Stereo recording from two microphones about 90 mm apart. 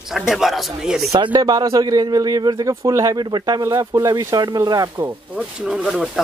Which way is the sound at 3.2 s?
50° right (ahead or behind).